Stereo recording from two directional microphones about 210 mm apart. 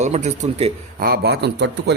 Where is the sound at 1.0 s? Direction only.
50° right (ahead or behind).